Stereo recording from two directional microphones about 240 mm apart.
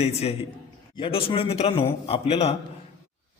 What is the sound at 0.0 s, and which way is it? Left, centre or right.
A man's voice, left.